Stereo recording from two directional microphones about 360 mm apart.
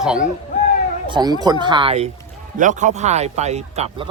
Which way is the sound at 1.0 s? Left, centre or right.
Centre.